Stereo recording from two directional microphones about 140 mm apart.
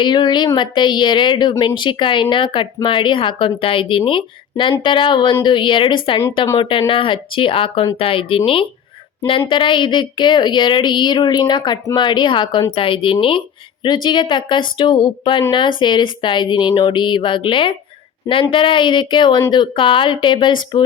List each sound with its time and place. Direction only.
0.0 s a woman's voice: 35° left (ahead or behind)